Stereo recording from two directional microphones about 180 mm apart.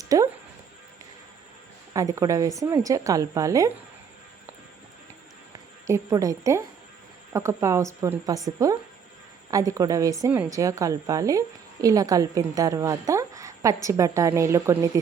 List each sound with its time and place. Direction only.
0.0 s music: 20° right (ahead or behind)
1.9 s a woman's voice: 20° right (ahead or behind)
5.9 s a woman's voice: 15° right (ahead or behind)